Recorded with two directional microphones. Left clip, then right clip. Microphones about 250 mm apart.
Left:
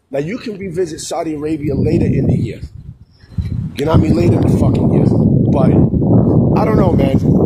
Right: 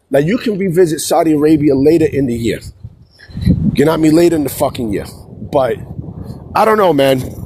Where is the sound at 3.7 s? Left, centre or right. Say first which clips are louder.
Right 4 dB; right.